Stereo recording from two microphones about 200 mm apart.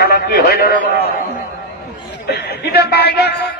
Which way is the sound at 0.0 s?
50° left (ahead or behind).